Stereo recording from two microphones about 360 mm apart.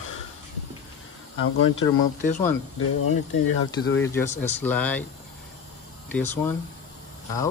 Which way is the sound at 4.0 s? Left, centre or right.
Centre.